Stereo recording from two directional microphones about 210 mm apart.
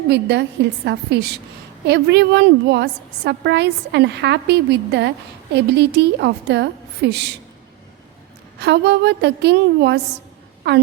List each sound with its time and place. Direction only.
0.1 s a woman's voice: 55° right (ahead or behind)
8.5 s a woman's voice: 55° right (ahead or behind)